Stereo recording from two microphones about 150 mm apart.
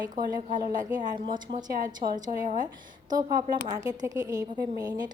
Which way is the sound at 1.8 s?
70° right (ahead or behind).